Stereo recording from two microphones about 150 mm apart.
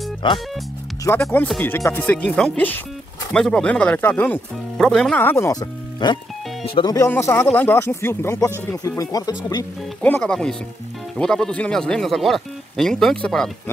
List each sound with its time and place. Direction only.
0.2 s speech: 30° left (ahead or behind)
1.0 s speech: 15° left (ahead or behind)
7.1 s speech: 15° left (ahead or behind)
10.0 s speech: 10° left (ahead or behind)